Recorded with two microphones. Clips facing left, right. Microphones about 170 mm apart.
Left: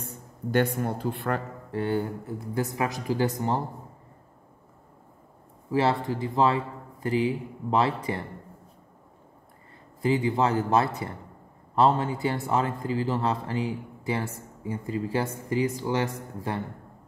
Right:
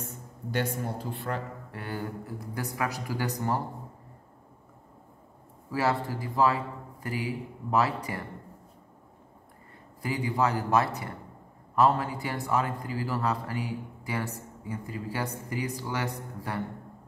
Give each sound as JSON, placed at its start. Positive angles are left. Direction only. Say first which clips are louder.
{"t": 0.5, "sound": "speech", "louder": "left 6 dB", "side_deg": 55}
{"t": 1.7, "sound": "a man's voice", "louder": "left 10 dB", "side_deg": 25}
{"t": 5.7, "sound": "a man's voice", "louder": "left 4 dB", "side_deg": 25}
{"t": 10.0, "sound": "a man's voice", "louder": "left 4 dB", "side_deg": 25}